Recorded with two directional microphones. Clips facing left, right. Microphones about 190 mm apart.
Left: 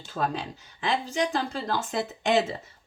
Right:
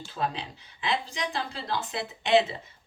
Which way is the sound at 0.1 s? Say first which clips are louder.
Left 3 dB; 45° left (ahead or behind).